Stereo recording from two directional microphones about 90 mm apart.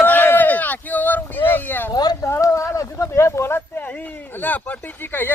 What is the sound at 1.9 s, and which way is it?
Speech, 45° left (ahead or behind).